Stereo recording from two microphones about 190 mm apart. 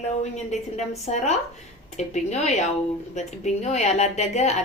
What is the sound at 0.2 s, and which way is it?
A woman's voice, 35° left (ahead or behind).